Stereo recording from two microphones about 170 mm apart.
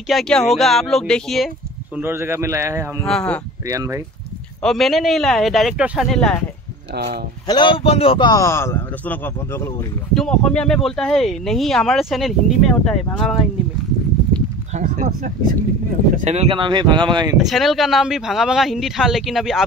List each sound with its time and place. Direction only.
0.1 s speech: centre (ahead or behind)
2.0 s a man's voice: 15° right (ahead or behind)
3.1 s speech: 5° left (ahead or behind)
3.6 s speech: 20° right (ahead or behind)
4.6 s speech: centre (ahead or behind)
7.4 s a man's voice: 25° left (ahead or behind); by 13.4 s 5° left (ahead or behind)
14.7 s speech: 50° right (ahead or behind)
16.3 s speech: 35° right (ahead or behind)
17.4 s speech: centre (ahead or behind)